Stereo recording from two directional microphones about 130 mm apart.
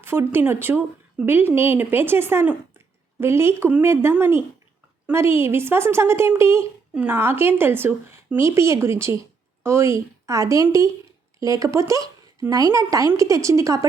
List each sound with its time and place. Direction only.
0.0 s a woman's voice: 15° right (ahead or behind)